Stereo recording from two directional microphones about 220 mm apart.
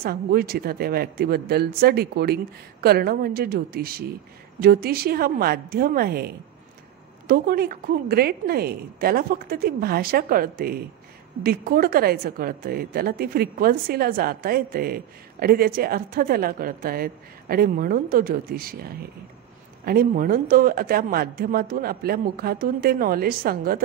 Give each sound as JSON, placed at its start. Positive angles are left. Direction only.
{"t": 0.0, "sound": "a woman's voice", "side_deg": -45}